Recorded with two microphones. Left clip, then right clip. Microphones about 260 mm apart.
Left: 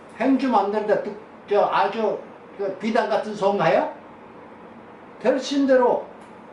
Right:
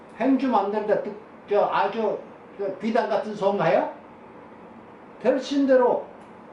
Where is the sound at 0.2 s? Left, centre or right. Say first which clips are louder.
Left 2 dB; centre.